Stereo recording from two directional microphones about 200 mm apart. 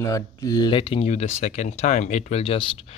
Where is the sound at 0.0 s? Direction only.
15° left (ahead or behind).